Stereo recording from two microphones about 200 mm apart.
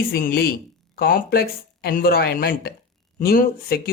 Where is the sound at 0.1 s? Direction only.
45° left (ahead or behind).